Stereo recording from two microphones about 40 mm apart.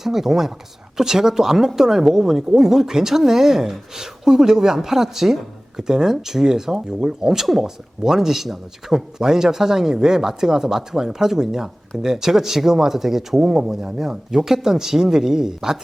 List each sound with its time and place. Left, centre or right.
0.0 s speech: centre